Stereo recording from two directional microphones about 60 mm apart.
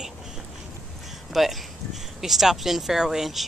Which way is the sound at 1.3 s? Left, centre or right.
Centre.